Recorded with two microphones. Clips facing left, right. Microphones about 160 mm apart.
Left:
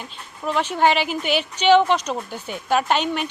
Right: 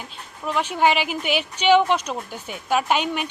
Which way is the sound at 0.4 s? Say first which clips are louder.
Left 1 dB; 5° right (ahead or behind).